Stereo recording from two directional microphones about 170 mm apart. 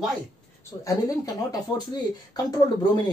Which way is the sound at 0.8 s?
20° left (ahead or behind).